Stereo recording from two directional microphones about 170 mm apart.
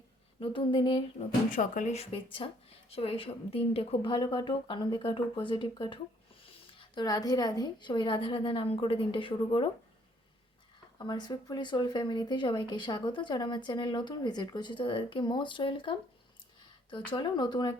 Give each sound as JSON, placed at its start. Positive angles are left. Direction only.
{"t": 0.3, "sound": "speech", "side_deg": 30}
{"t": 1.5, "sound": "speech", "side_deg": 50}
{"t": 10.9, "sound": "speech", "side_deg": 25}